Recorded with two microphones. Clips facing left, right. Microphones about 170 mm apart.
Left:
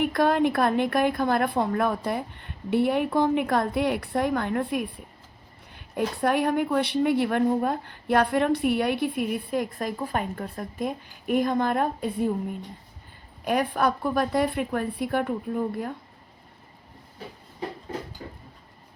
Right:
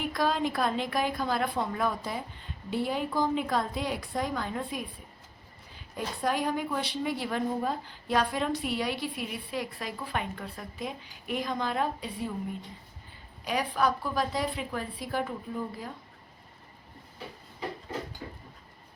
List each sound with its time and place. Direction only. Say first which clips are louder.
0.0 s a woman's voice: left 7 dB; 60° left (ahead or behind)
13.4 s a woman's voice: left 4 dB; 55° left (ahead or behind)